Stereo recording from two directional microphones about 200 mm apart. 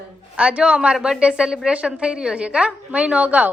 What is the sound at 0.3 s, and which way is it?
A woman's voice, 5° right (ahead or behind).